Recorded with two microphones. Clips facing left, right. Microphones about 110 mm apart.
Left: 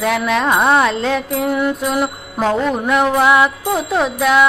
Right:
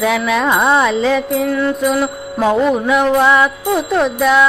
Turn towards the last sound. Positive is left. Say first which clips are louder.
# right 1 dB
turn(degrees=5)  # may be behind; listen again after turning